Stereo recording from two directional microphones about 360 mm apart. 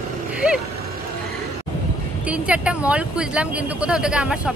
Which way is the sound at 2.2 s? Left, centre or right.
Centre.